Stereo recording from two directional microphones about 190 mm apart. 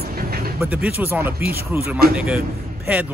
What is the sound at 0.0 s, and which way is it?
Vehicle, 50° right (ahead or behind).